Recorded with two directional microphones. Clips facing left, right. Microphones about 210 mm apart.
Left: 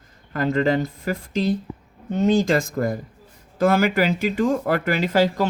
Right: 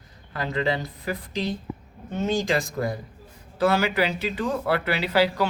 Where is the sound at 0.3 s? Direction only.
45° left (ahead or behind).